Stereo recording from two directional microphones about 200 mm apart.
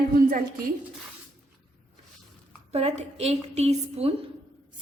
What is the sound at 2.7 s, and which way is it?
A woman's voice, 30° right (ahead or behind).